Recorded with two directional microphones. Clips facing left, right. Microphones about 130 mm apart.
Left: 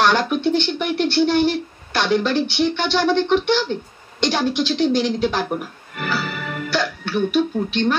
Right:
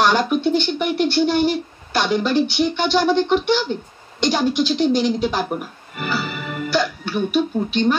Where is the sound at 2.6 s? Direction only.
10° right (ahead or behind).